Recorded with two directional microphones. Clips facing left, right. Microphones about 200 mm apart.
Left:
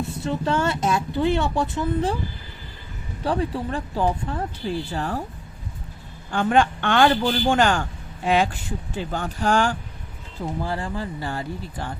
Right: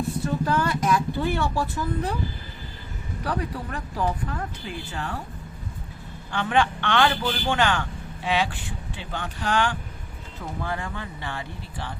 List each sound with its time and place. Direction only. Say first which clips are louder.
0.0 s speech: even; 25° left (ahead or behind)
3.2 s speech: left 5 dB; 25° left (ahead or behind)
6.3 s a man's voice: left 4 dB; 45° left (ahead or behind)
10.6 s speech: left 2 dB; 30° left (ahead or behind)